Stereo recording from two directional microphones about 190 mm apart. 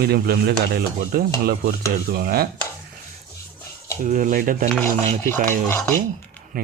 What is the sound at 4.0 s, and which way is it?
Speech, 45° right (ahead or behind).